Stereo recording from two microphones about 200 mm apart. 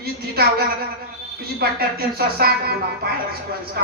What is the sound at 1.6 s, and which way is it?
A woman's voice, 50° right (ahead or behind).